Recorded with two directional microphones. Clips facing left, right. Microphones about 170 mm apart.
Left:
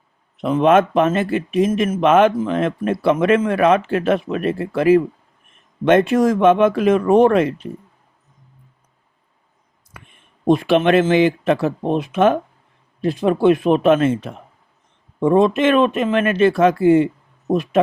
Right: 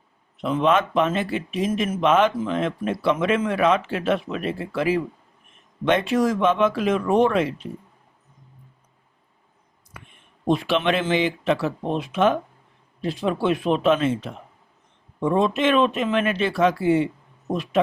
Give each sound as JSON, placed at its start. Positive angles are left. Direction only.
{"t": 0.4, "sound": "speech", "side_deg": 50}
{"t": 10.4, "sound": "speech", "side_deg": 50}